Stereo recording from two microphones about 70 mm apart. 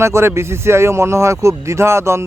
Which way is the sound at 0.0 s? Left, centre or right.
Right.